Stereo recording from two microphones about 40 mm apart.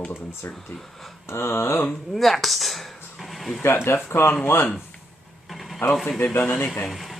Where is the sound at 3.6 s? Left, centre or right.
Left.